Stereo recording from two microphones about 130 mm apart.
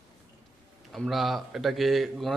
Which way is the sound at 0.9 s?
Centre (ahead or behind).